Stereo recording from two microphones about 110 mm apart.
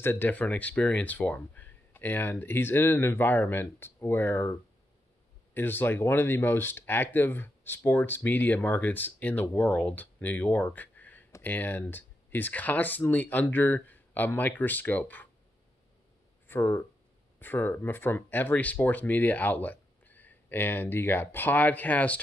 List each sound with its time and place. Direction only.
0.0 s speech: 20° left (ahead or behind)
16.4 s speech: 20° left (ahead or behind)